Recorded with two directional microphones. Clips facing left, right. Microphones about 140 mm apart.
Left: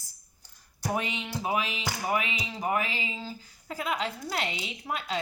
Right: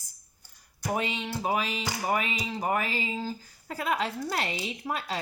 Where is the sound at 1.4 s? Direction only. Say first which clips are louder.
Right 1 dB; 40° right (ahead or behind).